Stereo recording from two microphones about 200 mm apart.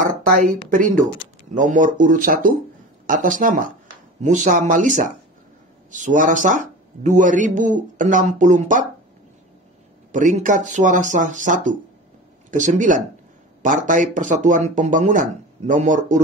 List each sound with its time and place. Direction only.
0.7 s speech: 40° right (ahead or behind)
10.1 s speech: 40° right (ahead or behind)